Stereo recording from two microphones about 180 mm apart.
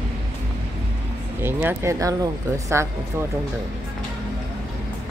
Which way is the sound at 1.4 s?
15° right (ahead or behind).